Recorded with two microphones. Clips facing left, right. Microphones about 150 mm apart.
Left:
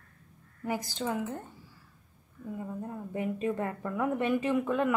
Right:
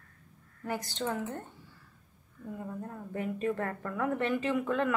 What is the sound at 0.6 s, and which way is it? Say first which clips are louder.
Speech: left 1 dB; 10° left (ahead or behind).